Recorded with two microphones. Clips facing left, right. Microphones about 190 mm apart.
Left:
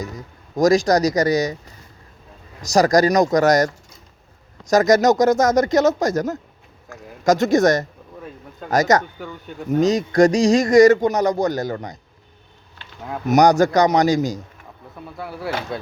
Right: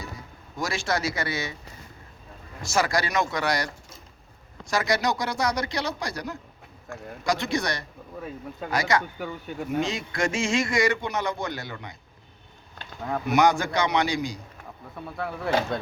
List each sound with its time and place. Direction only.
0.0 s a man's voice: 40° left (ahead or behind)
2.6 s speech: 40° left (ahead or behind)
13.2 s speech: 40° left (ahead or behind)
15.1 s speech: 5° left (ahead or behind)